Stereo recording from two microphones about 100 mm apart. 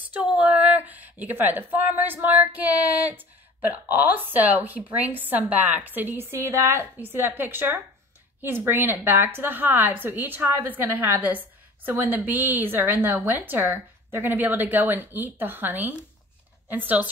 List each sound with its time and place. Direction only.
0.1 s a woman's voice: 15° right (ahead or behind)